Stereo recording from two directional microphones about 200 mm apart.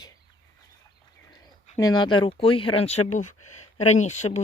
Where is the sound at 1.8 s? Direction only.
20° left (ahead or behind); by 4.4 s 35° left (ahead or behind).